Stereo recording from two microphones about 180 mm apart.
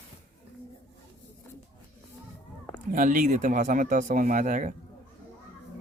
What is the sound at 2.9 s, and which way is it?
Speech, 50° right (ahead or behind).